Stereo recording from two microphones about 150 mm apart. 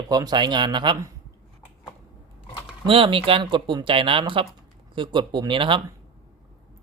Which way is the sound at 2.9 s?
35° right (ahead or behind).